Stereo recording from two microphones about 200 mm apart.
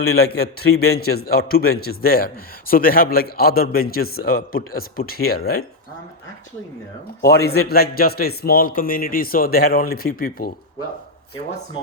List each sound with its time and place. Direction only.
0.2 s a man's voice: 50° left (ahead or behind)
7.2 s a man's voice: 50° left (ahead or behind)